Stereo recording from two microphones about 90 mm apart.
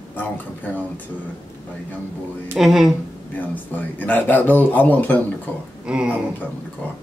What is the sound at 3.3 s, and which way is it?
A man's voice, 20° left (ahead or behind).